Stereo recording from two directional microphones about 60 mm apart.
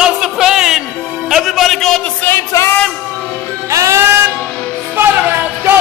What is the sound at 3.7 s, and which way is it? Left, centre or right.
Music, right.